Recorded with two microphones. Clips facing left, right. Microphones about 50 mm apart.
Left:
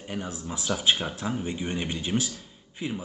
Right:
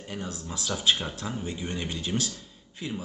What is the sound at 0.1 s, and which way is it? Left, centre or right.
Speech, centre.